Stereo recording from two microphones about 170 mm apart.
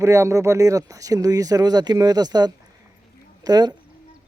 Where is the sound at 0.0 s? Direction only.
15° right (ahead or behind).